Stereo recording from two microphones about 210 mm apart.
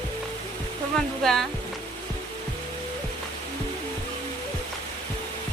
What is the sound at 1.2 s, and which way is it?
Music, centre (ahead or behind).